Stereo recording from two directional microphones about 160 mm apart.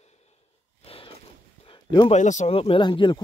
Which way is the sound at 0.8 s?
35° left (ahead or behind).